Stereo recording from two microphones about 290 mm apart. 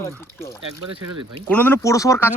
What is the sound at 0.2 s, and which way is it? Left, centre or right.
Speech, centre.